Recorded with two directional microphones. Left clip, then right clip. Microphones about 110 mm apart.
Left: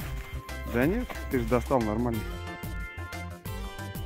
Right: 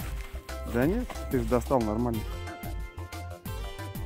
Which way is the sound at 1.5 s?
10° right (ahead or behind).